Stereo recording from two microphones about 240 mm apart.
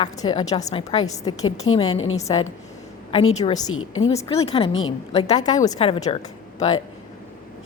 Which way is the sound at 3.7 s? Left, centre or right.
Left.